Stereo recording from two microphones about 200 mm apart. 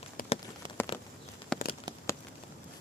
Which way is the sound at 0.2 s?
45° left (ahead or behind).